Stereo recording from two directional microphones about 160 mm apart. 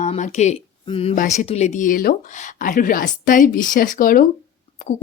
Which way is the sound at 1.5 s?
45° left (ahead or behind).